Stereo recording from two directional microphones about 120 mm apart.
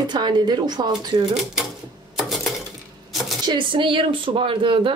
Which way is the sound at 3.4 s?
40° right (ahead or behind).